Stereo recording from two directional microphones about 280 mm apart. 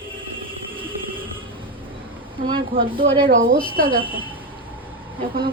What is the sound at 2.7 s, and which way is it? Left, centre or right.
Speech, centre.